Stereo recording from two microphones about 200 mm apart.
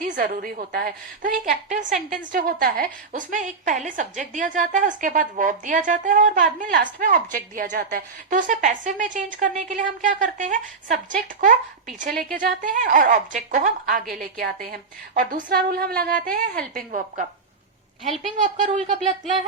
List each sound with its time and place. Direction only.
0.0 s a woman's voice: 45° right (ahead or behind)
18.3 s a woman's voice: 35° right (ahead or behind)
18.8 s speech: centre (ahead or behind)